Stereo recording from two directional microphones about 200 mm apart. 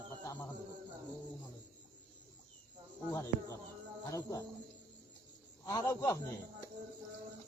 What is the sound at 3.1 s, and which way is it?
Insect, 15° left (ahead or behind).